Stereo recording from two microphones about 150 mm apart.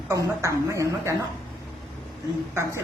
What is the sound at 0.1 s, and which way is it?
A woman's voice, 20° right (ahead or behind).